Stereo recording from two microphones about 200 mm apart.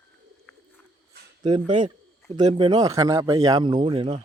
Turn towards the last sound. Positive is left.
turn(degrees=-25)  # may be behind; listen again after turning